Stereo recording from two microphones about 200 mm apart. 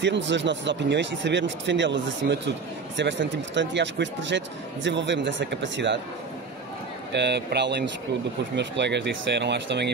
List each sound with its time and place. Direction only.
0.0 s speech: 65° right (ahead or behind)
7.1 s speech: 60° right (ahead or behind)